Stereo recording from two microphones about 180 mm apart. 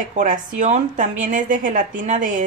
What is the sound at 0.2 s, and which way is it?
Speech, 45° right (ahead or behind).